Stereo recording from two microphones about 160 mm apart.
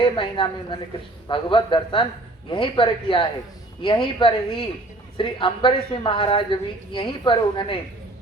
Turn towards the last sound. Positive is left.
turn(degrees=30)  # may be behind; listen again after turning